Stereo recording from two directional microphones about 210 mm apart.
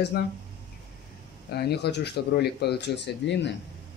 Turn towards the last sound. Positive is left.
turn(degrees=55)  # may be behind; listen again after turning